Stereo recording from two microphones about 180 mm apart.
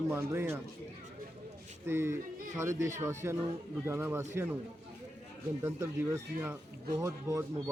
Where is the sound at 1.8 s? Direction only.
15° right (ahead or behind).